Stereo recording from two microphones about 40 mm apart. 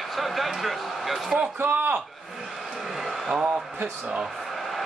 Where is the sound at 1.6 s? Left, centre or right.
Right.